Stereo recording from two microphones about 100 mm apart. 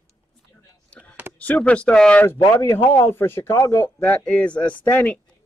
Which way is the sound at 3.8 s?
15° left (ahead or behind).